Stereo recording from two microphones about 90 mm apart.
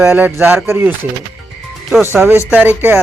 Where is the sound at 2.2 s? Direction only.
25° right (ahead or behind).